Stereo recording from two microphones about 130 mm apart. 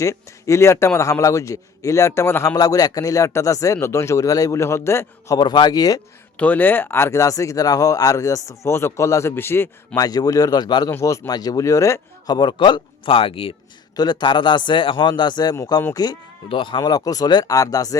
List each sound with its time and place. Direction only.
0.0 s speech: 25° left (ahead or behind)
2.6 s speech: 30° left (ahead or behind)
5.4 s a man's voice: 35° left (ahead or behind)
6.3 s speech: 10° left (ahead or behind)
9.9 s a man's voice: 30° left (ahead or behind); by 13.6 s 45° left (ahead or behind)
13.9 s a man's voice: 30° left (ahead or behind)
16.8 s speech: 25° left (ahead or behind)